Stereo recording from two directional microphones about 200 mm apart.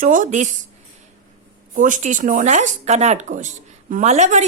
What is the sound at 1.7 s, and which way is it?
A woman's voice, 40° right (ahead or behind).